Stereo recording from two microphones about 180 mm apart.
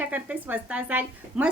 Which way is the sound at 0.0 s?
10° right (ahead or behind).